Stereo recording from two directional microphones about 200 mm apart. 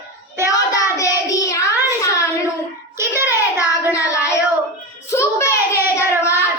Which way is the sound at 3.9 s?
15° left (ahead or behind).